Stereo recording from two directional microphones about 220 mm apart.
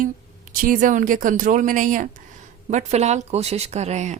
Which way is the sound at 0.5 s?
40° right (ahead or behind).